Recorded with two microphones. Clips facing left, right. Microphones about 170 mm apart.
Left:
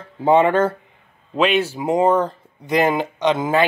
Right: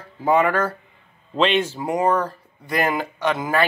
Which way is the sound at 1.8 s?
25° left (ahead or behind).